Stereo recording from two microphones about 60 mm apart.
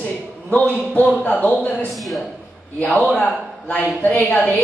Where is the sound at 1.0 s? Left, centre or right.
Left.